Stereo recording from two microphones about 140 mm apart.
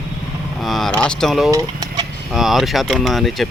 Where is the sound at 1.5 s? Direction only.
25° right (ahead or behind).